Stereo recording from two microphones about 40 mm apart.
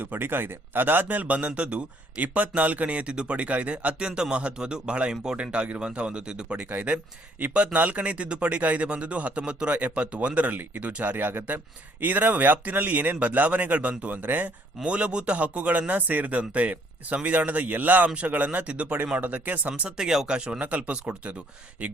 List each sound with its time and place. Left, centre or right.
0.0 s speech: right
1.0 s speech: right
7.5 s speech: right
10.3 s speech: right
14.8 s speech: right
19.1 s speech: right
20.0 s speech: centre
20.6 s speech: right